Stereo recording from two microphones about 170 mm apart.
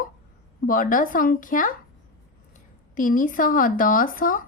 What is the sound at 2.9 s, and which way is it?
A woman's voice, 55° left (ahead or behind).